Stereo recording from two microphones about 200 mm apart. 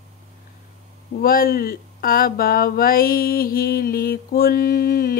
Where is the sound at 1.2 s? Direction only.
45° left (ahead or behind).